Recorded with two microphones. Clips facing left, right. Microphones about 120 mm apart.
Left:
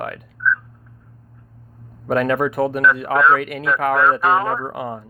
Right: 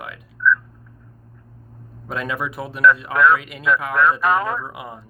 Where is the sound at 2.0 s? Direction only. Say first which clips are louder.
Left 8 dB; 55° left (ahead or behind).